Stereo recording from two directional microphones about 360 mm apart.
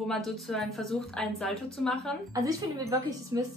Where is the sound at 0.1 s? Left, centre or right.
Centre.